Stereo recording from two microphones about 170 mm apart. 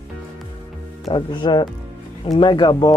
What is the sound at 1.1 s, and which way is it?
Speech, 25° left (ahead or behind).